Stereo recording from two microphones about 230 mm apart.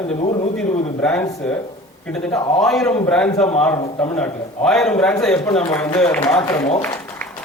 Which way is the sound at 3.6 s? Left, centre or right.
Centre.